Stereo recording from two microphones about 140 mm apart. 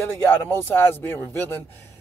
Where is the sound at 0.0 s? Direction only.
15° left (ahead or behind).